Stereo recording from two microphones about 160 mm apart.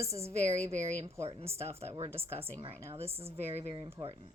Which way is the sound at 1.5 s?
15° right (ahead or behind).